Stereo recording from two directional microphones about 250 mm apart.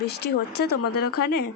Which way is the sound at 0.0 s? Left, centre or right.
Left.